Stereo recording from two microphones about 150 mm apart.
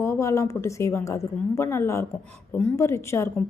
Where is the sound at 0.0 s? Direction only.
20° left (ahead or behind).